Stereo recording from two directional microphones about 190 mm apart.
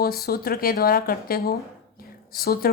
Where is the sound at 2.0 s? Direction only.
50° left (ahead or behind).